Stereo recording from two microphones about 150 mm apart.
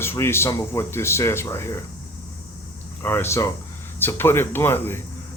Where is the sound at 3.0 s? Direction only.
15° left (ahead or behind).